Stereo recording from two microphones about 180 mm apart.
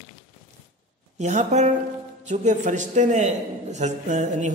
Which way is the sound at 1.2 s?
40° right (ahead or behind).